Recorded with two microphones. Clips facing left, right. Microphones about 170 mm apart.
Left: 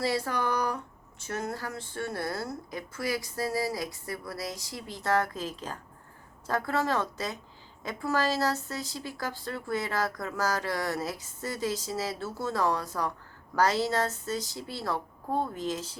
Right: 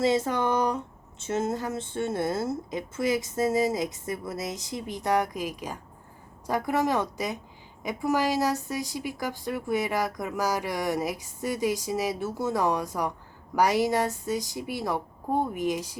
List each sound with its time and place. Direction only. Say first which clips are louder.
0.0 s a woman's voice: right 5 dB; 20° right (ahead or behind)